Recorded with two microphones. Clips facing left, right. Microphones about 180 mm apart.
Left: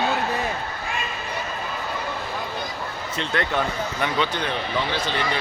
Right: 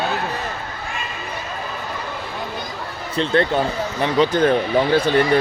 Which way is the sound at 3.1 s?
30° right (ahead or behind).